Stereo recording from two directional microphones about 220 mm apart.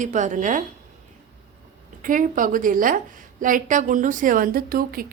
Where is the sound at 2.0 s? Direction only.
35° right (ahead or behind).